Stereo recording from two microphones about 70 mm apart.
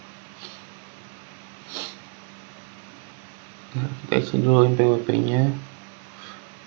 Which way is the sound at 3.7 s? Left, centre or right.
Centre.